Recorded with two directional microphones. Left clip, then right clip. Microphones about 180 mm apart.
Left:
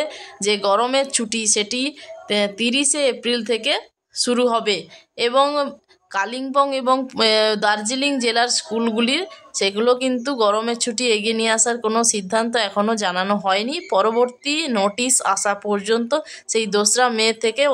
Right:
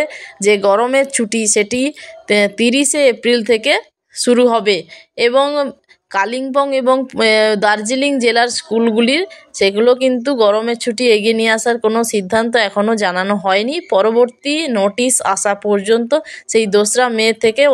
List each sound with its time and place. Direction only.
0.0 s speech: 25° right (ahead or behind)